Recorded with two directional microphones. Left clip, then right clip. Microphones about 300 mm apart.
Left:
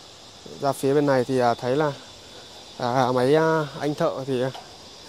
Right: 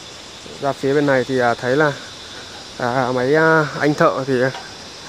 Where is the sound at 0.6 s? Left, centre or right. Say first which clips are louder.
Right 3 dB; left.